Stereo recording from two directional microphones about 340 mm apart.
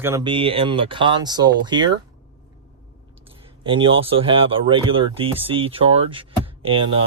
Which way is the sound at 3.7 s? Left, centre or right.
Centre.